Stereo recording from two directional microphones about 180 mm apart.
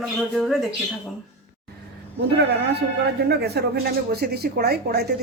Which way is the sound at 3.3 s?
65° right (ahead or behind).